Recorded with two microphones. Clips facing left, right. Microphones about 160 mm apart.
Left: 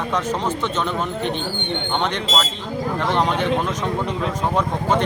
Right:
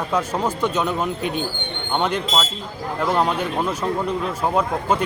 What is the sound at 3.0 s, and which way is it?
Speech, 5° right (ahead or behind).